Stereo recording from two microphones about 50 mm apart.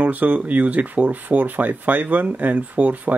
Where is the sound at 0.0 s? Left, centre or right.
Right.